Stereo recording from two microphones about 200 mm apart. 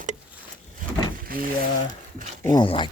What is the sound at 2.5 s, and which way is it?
Speech, 25° left (ahead or behind).